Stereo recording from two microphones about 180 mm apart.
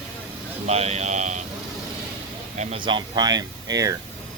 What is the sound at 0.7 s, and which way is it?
Speech, 35° right (ahead or behind).